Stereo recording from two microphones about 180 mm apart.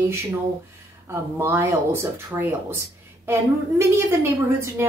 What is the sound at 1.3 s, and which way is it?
A woman's voice, 15° right (ahead or behind).